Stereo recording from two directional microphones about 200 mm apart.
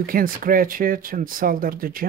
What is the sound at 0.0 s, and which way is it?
Speech, 45° right (ahead or behind).